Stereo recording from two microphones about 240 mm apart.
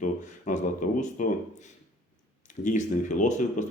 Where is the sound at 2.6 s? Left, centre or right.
Left.